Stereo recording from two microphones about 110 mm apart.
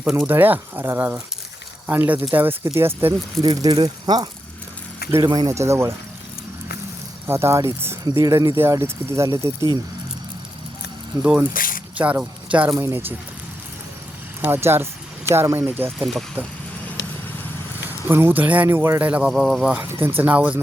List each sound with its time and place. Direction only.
0.3 s speech: 15° right (ahead or behind)
3.4 s speech: 40° right (ahead or behind)
5.5 s speech: 25° right (ahead or behind)
7.3 s speech: 25° right (ahead or behind)
11.2 s speech: 15° right (ahead or behind)
14.4 s speech: 20° right (ahead or behind)
16.0 s speech: centre (ahead or behind)
17.8 s speech: 20° right (ahead or behind)
19.3 s speech: centre (ahead or behind)
19.7 s speech: 20° right (ahead or behind)